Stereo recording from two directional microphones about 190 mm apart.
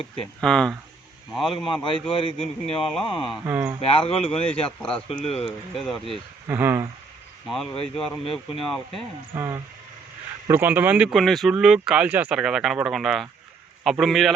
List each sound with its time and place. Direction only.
0.4 s speech: 5° left (ahead or behind)
1.6 s a man's voice: 25° left (ahead or behind)
2.8 s speech: centre (ahead or behind)
3.4 s speech: 15° right (ahead or behind)
3.8 s a man's voice: 30° left (ahead or behind)
4.9 s speech: 5° left (ahead or behind)
6.5 s speech: 10° right (ahead or behind)
7.4 s speech: centre (ahead or behind)
9.3 s speech: 15° right (ahead or behind); by 14.3 s centre (ahead or behind)